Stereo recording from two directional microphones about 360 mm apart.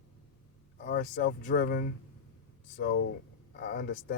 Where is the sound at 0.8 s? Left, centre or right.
Left.